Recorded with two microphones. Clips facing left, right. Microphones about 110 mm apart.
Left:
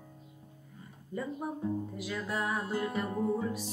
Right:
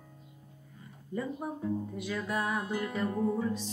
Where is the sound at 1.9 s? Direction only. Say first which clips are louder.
Right 2 dB; centre (ahead or behind).